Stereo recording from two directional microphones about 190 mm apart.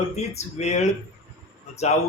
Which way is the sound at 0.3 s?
35° left (ahead or behind).